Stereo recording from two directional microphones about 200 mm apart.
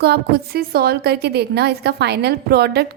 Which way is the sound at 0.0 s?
55° right (ahead or behind).